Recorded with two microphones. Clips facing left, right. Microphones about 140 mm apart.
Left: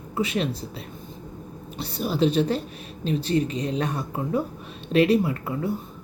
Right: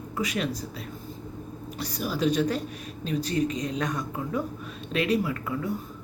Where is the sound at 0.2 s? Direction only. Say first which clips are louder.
Left 4 dB; 30° left (ahead or behind).